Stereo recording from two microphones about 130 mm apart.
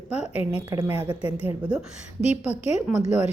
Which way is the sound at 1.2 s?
50° left (ahead or behind).